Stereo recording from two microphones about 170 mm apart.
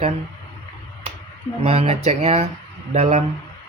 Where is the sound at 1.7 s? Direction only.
35° right (ahead or behind).